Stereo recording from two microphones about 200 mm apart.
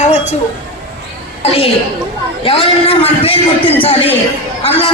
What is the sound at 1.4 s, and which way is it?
A woman's voice, 30° left (ahead or behind).